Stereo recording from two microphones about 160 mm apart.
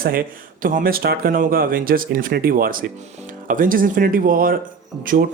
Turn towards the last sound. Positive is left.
turn(degrees=-60)  # may be behind; listen again after turning